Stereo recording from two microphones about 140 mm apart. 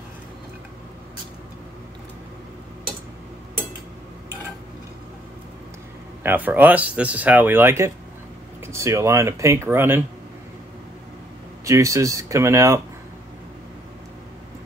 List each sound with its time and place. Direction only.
6.2 s speech: 10° right (ahead or behind)
11.6 s speech: 20° right (ahead or behind)